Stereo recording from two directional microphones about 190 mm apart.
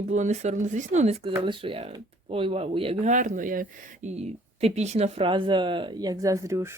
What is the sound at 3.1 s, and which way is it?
Speech, 45° right (ahead or behind).